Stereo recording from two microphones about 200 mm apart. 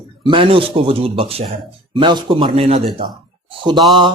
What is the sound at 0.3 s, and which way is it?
Speech, 25° right (ahead or behind).